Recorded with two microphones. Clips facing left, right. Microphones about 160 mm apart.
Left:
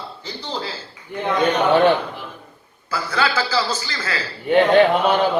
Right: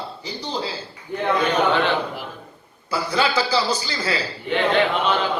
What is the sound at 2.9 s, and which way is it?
A man's voice, 15° right (ahead or behind).